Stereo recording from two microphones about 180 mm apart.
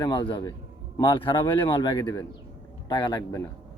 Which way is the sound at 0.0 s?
25° left (ahead or behind).